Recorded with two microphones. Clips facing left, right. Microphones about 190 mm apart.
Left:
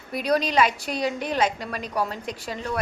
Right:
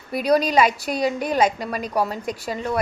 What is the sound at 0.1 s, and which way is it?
A woman's voice, 10° right (ahead or behind).